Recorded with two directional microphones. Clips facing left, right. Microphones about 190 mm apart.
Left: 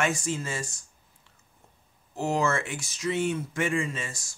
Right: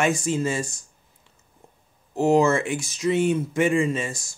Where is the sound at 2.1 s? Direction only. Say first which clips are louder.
Right 8 dB; 20° right (ahead or behind).